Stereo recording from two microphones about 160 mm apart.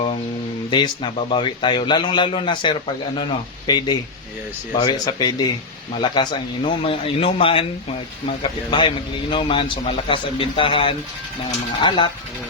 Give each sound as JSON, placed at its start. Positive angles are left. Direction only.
{"t": 0.7, "sound": "a man's voice", "side_deg": 30}